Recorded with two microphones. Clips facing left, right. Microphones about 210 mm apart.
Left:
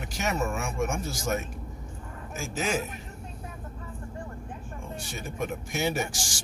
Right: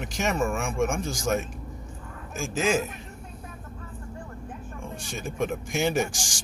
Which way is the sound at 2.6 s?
Centre (ahead or behind).